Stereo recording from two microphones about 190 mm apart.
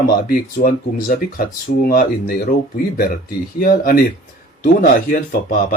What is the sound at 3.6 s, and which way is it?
Speech, 50° left (ahead or behind).